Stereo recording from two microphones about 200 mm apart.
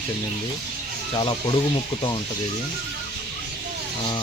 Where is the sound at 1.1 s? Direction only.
25° left (ahead or behind).